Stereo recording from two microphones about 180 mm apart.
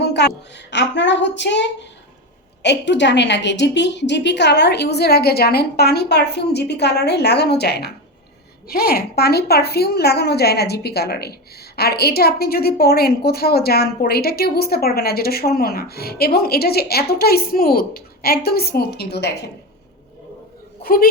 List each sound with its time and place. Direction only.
0.0 s a woman's voice: 70° left (ahead or behind)
20.8 s a woman's voice: 55° left (ahead or behind)